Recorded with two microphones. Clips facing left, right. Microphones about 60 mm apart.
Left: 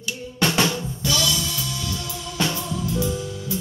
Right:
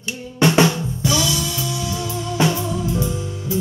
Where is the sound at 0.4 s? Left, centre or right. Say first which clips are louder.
Right 6 dB; right.